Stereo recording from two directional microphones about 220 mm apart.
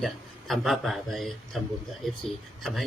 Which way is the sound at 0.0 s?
Centre (ahead or behind).